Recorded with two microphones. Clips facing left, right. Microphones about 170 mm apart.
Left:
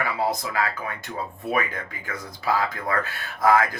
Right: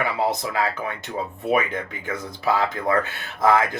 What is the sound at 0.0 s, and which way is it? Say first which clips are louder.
Speech: right 2 dB; 25° right (ahead or behind).